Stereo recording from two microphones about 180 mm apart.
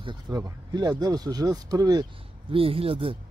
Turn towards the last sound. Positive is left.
turn(degrees=-30)  # may be behind; listen again after turning